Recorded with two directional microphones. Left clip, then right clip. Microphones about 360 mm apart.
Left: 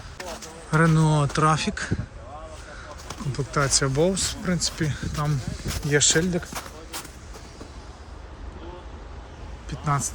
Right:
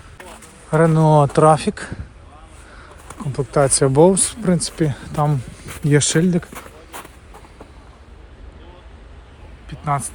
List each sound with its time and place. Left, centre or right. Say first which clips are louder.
0.7 s speech: right 8 dB; centre
3.1 s speech: right 8 dB; centre
9.6 s a sound: right 4 dB; centre